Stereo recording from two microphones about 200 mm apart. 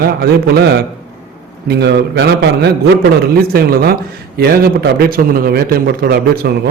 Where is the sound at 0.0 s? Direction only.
50° right (ahead or behind).